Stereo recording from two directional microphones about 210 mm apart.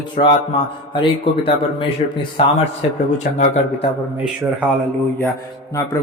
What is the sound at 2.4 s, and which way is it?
A man's voice, 25° left (ahead or behind).